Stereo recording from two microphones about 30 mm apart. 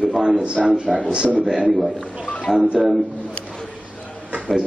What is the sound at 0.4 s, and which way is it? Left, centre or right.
Speech, right.